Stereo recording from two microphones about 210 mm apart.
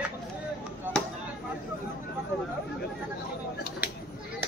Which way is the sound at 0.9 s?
5° left (ahead or behind).